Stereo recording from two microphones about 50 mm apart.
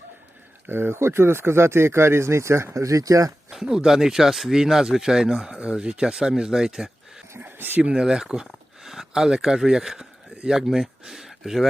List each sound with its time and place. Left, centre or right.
0.7 s speech: right
3.5 s speech: centre
7.3 s speech: right
7.8 s speech: right; by 11.6 s centre